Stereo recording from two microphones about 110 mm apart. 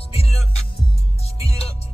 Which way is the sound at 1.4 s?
65° left (ahead or behind).